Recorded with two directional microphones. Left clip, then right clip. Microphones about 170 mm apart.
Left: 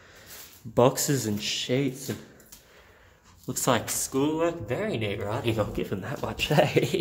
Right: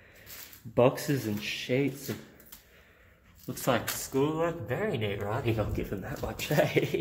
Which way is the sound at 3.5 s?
30° left (ahead or behind).